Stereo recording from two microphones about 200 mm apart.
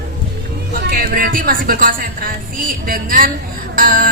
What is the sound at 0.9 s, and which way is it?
A woman's voice, 45° right (ahead or behind).